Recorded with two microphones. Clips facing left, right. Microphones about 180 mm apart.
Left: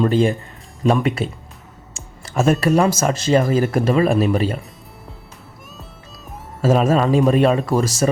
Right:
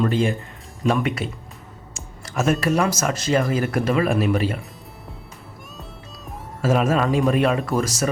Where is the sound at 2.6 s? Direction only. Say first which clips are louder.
Left 4 dB; 30° left (ahead or behind).